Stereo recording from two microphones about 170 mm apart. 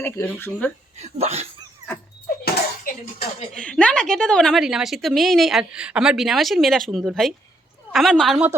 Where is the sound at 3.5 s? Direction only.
5° left (ahead or behind).